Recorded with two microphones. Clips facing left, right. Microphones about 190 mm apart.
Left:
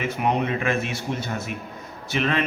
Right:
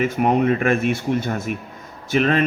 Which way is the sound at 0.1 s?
45° right (ahead or behind).